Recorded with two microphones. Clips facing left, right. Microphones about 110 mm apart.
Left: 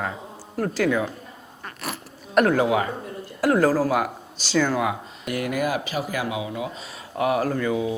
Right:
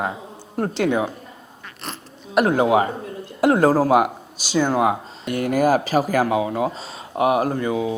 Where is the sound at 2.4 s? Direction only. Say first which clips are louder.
Right 3 dB; 25° right (ahead or behind); by 6.7 s 45° right (ahead or behind).